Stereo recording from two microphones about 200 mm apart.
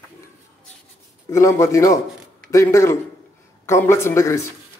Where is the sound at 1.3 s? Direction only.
15° left (ahead or behind).